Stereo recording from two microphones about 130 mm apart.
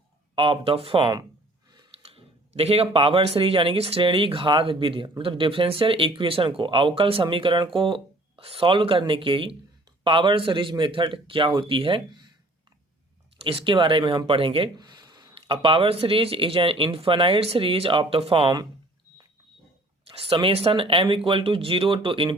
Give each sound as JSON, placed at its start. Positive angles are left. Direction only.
{"t": 0.3, "sound": "speech", "side_deg": -40}
{"t": 1.9, "sound": "a sound", "side_deg": -50}
{"t": 2.9, "sound": "a man's voice", "side_deg": -45}
{"t": 13.4, "sound": "speech", "side_deg": -45}
{"t": 20.1, "sound": "speech", "side_deg": -45}